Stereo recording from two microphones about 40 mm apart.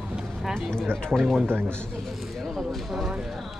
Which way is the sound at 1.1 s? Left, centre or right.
Centre.